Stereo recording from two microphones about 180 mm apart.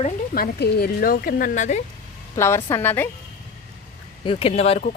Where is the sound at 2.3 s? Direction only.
15° left (ahead or behind).